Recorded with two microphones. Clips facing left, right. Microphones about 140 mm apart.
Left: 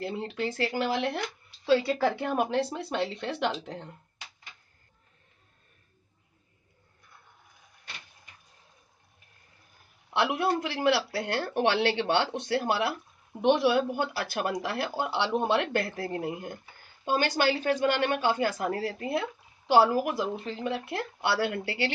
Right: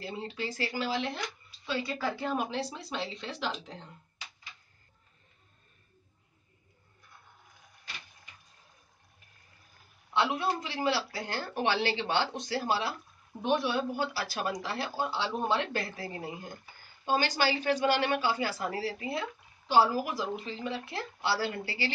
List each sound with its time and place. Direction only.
0.0 s speech: 60° left (ahead or behind)
10.1 s speech: 65° left (ahead or behind)
13.4 s speech: 75° left (ahead or behind)